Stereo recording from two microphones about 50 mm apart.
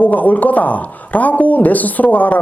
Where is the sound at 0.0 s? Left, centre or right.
Left.